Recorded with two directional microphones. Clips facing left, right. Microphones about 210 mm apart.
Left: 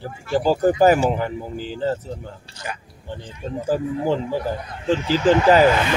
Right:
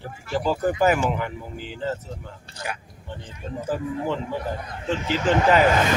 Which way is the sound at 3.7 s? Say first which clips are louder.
Left 5 dB; 35° left (ahead or behind).